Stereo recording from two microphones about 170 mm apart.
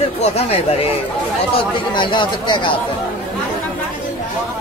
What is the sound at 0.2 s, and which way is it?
A man's voice, 35° left (ahead or behind).